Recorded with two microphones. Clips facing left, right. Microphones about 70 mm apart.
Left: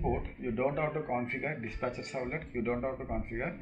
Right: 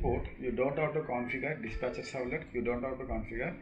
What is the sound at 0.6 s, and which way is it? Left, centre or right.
Speech, centre.